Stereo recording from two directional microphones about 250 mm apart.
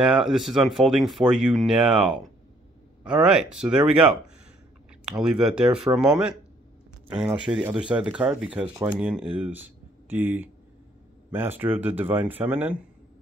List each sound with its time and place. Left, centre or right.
0.0 s speech: centre